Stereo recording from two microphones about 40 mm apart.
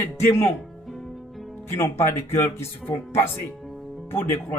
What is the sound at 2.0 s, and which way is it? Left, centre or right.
Speech, left.